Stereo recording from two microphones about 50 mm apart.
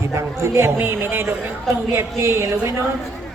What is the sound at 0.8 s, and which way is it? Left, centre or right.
A man's voice, right.